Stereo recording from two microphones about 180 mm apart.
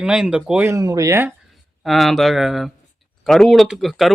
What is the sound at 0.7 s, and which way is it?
Speech, 20° right (ahead or behind).